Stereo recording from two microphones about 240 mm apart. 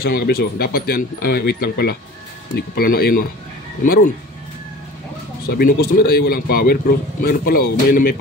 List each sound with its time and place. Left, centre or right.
0.0 s speech: left
5.5 s speech: left